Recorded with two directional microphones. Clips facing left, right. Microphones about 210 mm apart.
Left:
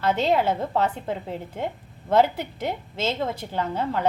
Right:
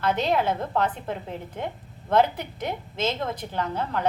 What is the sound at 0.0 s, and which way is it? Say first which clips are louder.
A woman's voice: left 2 dB; 10° left (ahead or behind).